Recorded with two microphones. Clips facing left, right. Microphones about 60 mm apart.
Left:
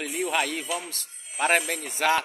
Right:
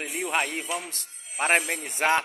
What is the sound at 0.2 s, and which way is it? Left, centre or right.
A man's voice, right.